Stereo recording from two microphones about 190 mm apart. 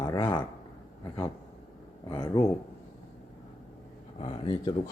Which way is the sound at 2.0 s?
20° left (ahead or behind).